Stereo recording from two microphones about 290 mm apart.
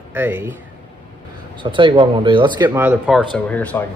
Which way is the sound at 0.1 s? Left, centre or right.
Centre.